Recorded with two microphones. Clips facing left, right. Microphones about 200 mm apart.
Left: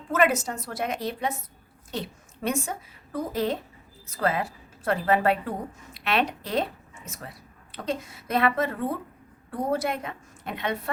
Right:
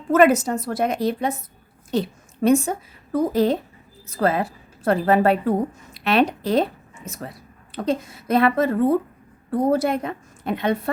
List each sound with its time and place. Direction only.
0.1 s a woman's voice: 40° right (ahead or behind)